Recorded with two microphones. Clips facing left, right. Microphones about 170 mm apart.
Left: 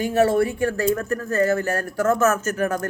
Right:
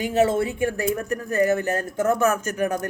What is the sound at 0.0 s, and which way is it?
A man's voice, 20° right (ahead or behind).